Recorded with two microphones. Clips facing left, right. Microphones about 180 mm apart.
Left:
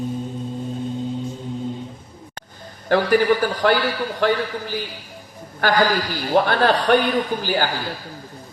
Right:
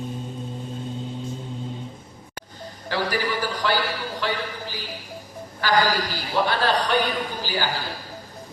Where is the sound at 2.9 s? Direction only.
50° left (ahead or behind).